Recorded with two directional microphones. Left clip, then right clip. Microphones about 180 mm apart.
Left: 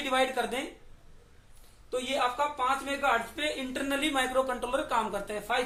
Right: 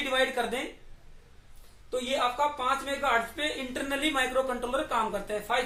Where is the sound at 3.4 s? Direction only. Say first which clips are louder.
Even; 20° left (ahead or behind).